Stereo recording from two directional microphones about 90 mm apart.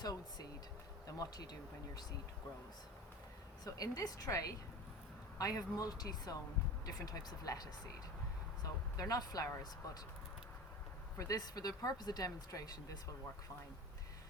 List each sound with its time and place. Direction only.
0.0 s speech: 45° left (ahead or behind)
3.6 s a woman's voice: 40° left (ahead or behind)
11.2 s speech: 40° left (ahead or behind)